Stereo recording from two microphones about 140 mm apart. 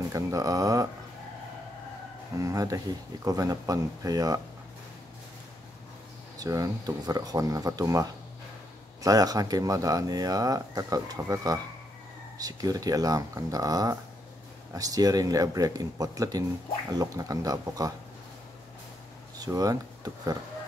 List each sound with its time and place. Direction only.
0.1 s speech: 25° right (ahead or behind)
2.3 s speech: 25° right (ahead or behind)
6.3 s speech: 25° right (ahead or behind)
19.3 s speech: 25° right (ahead or behind)